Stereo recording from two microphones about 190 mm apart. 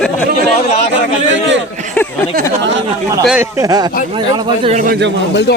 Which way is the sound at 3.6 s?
20° right (ahead or behind).